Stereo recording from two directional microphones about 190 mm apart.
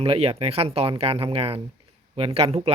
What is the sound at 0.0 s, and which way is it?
Speech, 30° right (ahead or behind).